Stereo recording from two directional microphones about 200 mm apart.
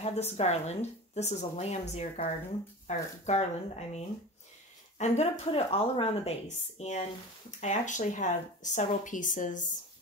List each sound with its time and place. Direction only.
0.0 s a woman's voice: 30° left (ahead or behind)